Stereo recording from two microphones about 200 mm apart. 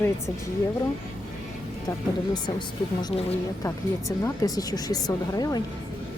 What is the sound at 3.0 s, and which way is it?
Speech, 30° left (ahead or behind).